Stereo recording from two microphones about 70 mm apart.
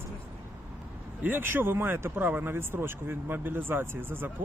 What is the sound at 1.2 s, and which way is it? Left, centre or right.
Speech, right.